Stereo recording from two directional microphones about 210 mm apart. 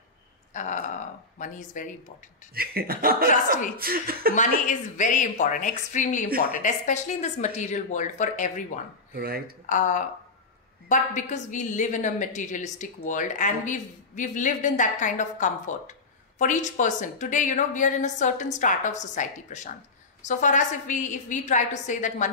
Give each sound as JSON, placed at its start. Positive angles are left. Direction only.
{"t": 0.5, "sound": "a sound", "side_deg": 35}
{"t": 1.4, "sound": "a woman's voice", "side_deg": 35}
{"t": 2.5, "sound": "speech", "side_deg": -45}
{"t": 4.4, "sound": "a woman's voice", "side_deg": 35}
{"t": 9.1, "sound": "speech", "side_deg": -45}
{"t": 9.7, "sound": "a woman's voice", "side_deg": 35}